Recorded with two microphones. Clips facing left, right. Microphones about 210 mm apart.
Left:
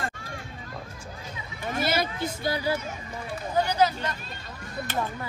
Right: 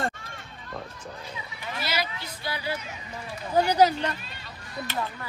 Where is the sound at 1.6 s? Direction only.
50° left (ahead or behind).